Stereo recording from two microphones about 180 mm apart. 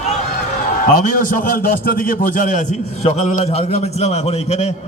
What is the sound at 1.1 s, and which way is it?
A man's voice, 50° left (ahead or behind).